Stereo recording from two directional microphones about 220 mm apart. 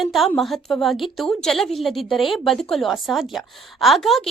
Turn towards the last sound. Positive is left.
turn(degrees=0)  # may be behind; listen again after turning